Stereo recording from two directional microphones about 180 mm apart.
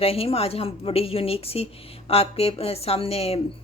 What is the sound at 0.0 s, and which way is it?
Speech, 35° left (ahead or behind).